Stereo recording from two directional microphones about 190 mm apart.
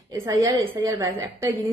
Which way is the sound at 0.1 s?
15° right (ahead or behind).